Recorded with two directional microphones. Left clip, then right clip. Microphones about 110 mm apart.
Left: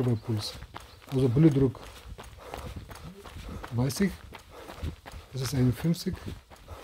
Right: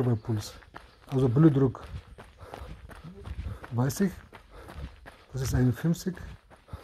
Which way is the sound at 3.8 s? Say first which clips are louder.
Even; 5° right (ahead or behind).